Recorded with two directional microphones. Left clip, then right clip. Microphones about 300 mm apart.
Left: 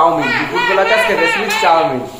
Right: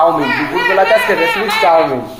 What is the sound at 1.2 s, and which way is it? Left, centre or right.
Speech, right.